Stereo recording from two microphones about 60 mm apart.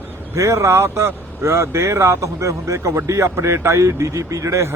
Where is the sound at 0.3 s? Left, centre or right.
Right.